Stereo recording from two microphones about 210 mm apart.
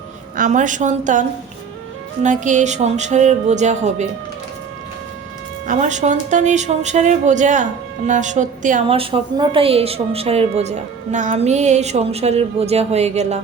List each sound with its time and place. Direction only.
0.3 s speech: 35° right (ahead or behind)
2.2 s speech: 35° right (ahead or behind)
5.6 s speech: 35° right (ahead or behind)